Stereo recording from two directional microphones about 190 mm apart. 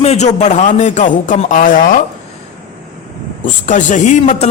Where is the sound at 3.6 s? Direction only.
40° left (ahead or behind).